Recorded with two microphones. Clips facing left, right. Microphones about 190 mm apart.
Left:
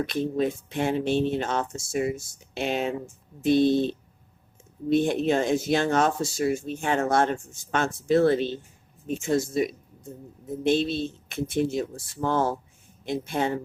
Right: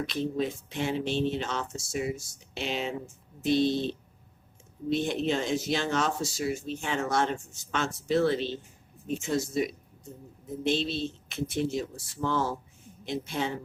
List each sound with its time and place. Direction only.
0.0 s speech: 55° left (ahead or behind)
10.6 s speech: 50° left (ahead or behind)